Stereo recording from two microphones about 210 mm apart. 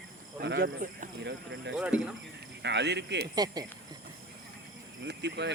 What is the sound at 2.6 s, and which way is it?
Speech, 55° right (ahead or behind).